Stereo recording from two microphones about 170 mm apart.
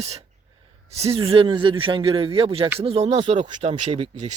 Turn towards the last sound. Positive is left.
turn(degrees=-35)  # may be behind; listen again after turning